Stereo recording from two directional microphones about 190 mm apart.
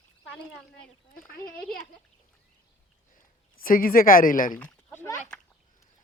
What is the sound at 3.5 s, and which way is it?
Speech, 45° left (ahead or behind).